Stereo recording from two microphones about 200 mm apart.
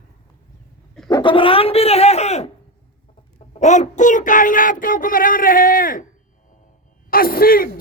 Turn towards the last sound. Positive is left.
turn(degrees=45)  # may be behind; listen again after turning